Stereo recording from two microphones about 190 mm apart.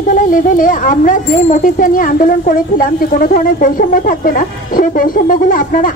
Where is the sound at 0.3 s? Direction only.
45° left (ahead or behind).